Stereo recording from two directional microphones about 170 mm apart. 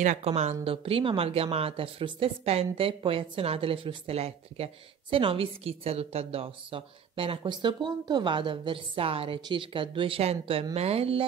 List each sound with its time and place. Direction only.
0.0 s a woman's voice: 40° right (ahead or behind)